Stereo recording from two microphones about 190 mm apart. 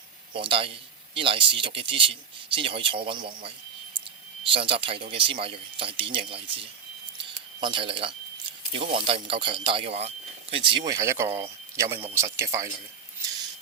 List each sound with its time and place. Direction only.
0.3 s a man's voice: 30° right (ahead or behind)
7.2 s a sound: 25° right (ahead or behind)
8.7 s a man's voice: 30° right (ahead or behind)